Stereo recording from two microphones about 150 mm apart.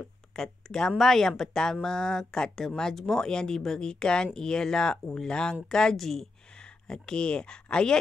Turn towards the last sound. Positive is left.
turn(degrees=5)  # may be behind; listen again after turning